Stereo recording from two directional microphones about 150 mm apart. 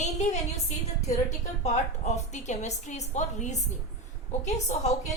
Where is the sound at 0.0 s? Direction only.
50° left (ahead or behind).